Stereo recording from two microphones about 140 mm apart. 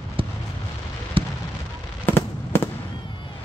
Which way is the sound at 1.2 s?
40° right (ahead or behind).